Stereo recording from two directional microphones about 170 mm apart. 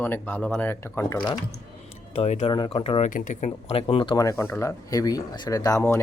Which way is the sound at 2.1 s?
40° left (ahead or behind).